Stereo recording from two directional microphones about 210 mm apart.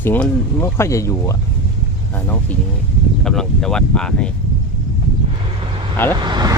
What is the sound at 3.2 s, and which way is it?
Speech, 5° left (ahead or behind).